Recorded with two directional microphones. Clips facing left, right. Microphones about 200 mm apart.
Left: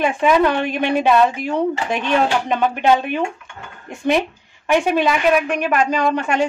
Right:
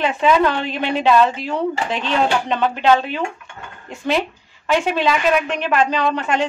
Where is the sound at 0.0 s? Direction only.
15° left (ahead or behind).